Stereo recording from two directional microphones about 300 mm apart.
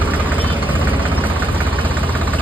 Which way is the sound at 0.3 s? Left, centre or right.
Centre.